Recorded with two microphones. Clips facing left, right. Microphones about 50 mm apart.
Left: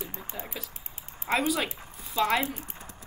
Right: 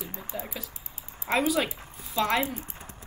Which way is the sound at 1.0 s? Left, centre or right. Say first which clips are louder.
Even; left.